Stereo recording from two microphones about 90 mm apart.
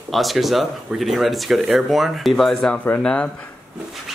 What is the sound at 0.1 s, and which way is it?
Speech, centre (ahead or behind).